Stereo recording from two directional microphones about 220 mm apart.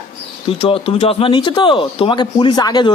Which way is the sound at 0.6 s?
25° left (ahead or behind).